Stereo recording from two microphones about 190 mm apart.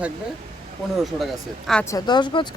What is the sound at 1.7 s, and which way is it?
Speech, 5° left (ahead or behind).